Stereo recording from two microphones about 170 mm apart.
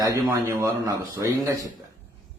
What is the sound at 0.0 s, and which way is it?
A man's voice, 15° right (ahead or behind).